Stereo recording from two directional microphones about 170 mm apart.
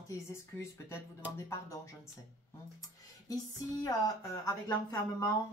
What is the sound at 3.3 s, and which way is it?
Speech, 20° left (ahead or behind).